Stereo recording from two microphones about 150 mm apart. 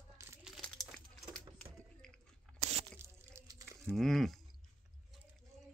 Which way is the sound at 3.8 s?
Centre (ahead or behind).